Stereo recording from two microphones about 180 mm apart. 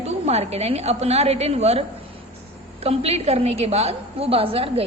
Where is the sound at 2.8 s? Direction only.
35° right (ahead or behind).